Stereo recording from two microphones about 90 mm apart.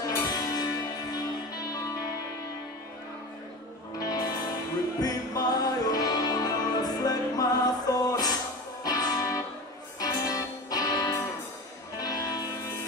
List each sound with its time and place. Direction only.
0.0 s music: 45° left (ahead or behind)
4.0 s music: 45° left (ahead or behind)